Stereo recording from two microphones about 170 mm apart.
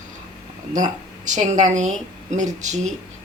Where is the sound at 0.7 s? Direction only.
45° right (ahead or behind).